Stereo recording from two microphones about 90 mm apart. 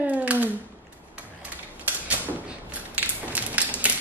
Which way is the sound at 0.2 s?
15° right (ahead or behind).